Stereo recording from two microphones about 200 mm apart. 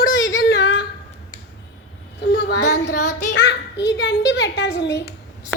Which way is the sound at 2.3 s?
60° left (ahead or behind).